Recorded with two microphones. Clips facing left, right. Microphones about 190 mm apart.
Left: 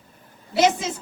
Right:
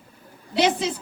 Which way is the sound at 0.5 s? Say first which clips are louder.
Left 1 dB; 45° left (ahead or behind).